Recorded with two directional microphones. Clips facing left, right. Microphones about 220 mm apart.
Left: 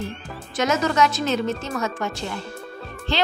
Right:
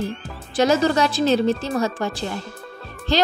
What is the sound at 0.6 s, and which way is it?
A woman's voice, 30° right (ahead or behind).